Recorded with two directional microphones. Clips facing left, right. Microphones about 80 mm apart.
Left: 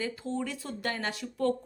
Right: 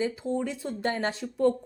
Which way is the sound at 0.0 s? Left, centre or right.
Centre.